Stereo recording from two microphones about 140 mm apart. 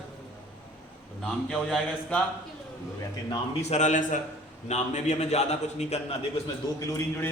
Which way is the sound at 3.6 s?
55° left (ahead or behind).